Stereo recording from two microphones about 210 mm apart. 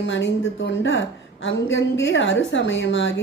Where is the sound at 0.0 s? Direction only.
60° left (ahead or behind).